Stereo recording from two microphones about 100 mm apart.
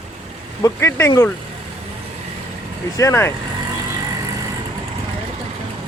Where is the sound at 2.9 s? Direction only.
30° left (ahead or behind).